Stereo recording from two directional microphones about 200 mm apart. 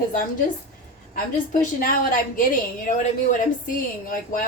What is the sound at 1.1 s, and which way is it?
A woman's voice, 45° left (ahead or behind).